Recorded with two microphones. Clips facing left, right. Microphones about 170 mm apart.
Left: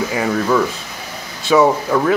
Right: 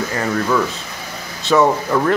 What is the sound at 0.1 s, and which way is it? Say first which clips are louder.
Speech: left 1 dB; 5° left (ahead or behind).